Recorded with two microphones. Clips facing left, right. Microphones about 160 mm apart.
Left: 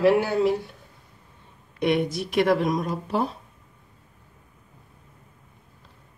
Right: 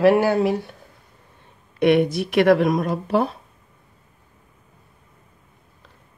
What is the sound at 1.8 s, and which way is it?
Speech, 65° right (ahead or behind).